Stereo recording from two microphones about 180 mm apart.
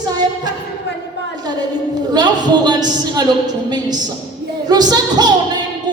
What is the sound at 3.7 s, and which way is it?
A woman's voice, 20° right (ahead or behind).